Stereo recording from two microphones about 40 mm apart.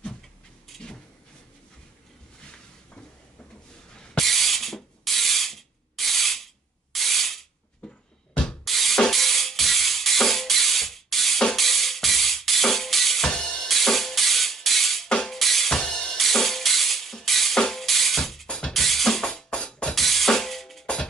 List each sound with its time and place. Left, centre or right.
0.7 s vehicle: centre
4.2 s ratchet: centre
8.6 s music: centre
13.4 s music: left
13.7 s music: centre
15.0 s music: left
15.3 s music: centre
15.8 s music: left
16.2 s music: centre
17.8 s drum: centre
18.7 s music: centre
19.2 s music: left
19.9 s drum: centre
20.8 s music: left